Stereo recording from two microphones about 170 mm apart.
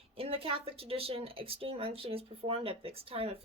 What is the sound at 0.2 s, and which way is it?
Speech, 35° right (ahead or behind).